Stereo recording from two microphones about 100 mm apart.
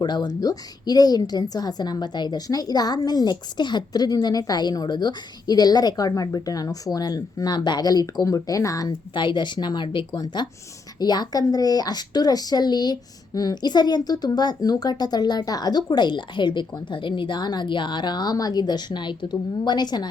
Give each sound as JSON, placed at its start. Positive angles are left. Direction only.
{"t": 0.0, "sound": "a woman's voice", "side_deg": 45}
{"t": 9.1, "sound": "speech", "side_deg": 50}